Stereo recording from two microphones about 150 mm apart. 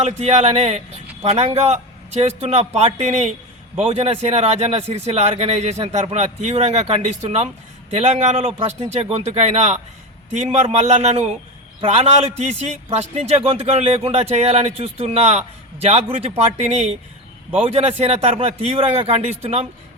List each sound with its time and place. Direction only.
0.0 s a man's voice: 45° right (ahead or behind)